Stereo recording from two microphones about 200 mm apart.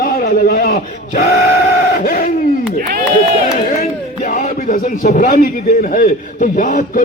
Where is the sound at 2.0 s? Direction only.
45° left (ahead or behind).